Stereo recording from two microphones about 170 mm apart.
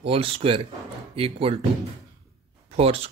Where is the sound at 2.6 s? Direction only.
35° right (ahead or behind).